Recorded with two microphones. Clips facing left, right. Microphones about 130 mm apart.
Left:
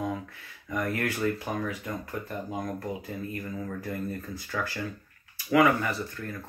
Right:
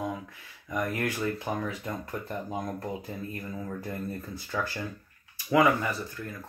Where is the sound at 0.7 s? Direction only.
15° right (ahead or behind).